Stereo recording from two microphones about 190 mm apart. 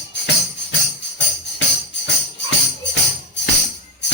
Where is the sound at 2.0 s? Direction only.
70° left (ahead or behind).